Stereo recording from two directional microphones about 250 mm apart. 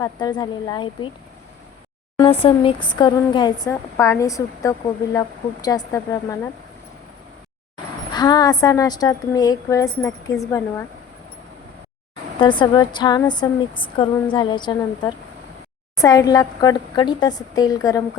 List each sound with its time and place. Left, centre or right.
0.0 s a woman's voice: centre
2.1 s a woman's voice: left
8.1 s a woman's voice: centre
12.4 s a woman's voice: centre